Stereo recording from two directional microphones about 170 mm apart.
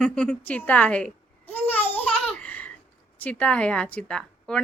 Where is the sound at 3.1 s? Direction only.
5° left (ahead or behind).